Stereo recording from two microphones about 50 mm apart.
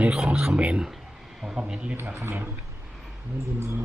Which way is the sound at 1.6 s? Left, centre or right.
Centre.